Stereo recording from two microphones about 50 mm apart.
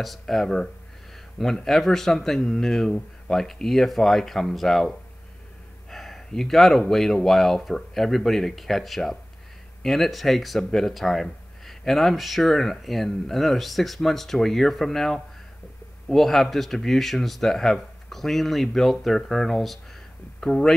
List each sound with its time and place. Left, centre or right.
0.0 s speech: centre
20.3 s speech: centre